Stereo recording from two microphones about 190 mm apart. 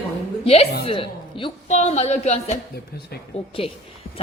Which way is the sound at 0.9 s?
30° left (ahead or behind).